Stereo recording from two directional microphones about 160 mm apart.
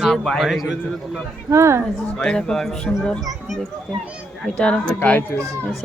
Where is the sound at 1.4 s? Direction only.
15° right (ahead or behind).